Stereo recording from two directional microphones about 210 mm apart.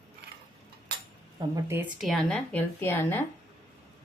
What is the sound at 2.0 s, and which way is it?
Speech, centre (ahead or behind).